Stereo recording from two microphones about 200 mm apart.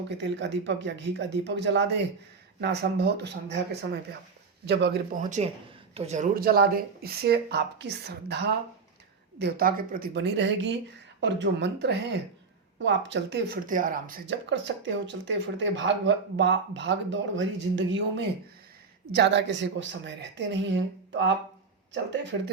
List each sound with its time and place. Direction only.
0.2 s speech: 65° right (ahead or behind)
5.1 s speech: 35° right (ahead or behind); by 13.6 s 60° right (ahead or behind)
13.7 s speech: 40° right (ahead or behind)
14.3 s speech: 65° right (ahead or behind)